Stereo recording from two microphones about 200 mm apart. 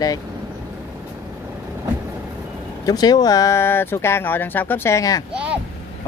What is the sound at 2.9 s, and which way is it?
Speech, 20° left (ahead or behind).